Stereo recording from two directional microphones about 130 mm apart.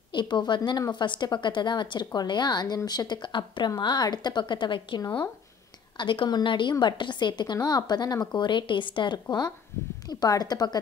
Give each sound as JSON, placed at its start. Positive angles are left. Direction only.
{"t": 0.1, "sound": "a woman's voice", "side_deg": 35}